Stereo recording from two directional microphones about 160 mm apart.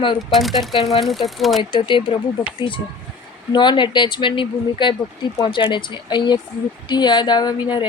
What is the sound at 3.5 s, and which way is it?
Speech, 30° left (ahead or behind).